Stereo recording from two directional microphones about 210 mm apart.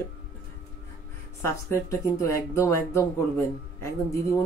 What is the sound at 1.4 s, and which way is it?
Speech, 15° left (ahead or behind).